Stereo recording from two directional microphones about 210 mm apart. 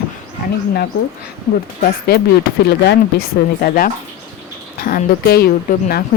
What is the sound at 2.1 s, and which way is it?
Speech, 45° left (ahead or behind).